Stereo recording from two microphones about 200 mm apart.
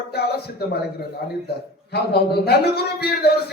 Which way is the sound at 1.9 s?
55° left (ahead or behind).